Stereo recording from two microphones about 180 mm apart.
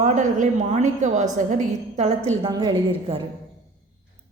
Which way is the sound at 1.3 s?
40° right (ahead or behind).